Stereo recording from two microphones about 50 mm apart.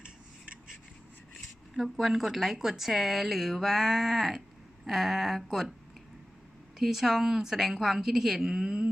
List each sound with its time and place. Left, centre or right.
0.0 s rub: right
1.7 s speech: centre
6.7 s a woman's voice: centre